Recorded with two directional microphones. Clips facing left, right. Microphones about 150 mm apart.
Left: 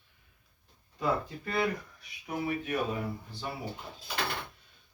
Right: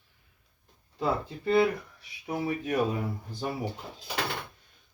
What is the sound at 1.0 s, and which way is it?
Speech, 25° right (ahead or behind).